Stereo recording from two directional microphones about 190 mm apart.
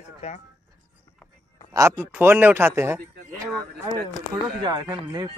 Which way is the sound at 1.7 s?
15° right (ahead or behind).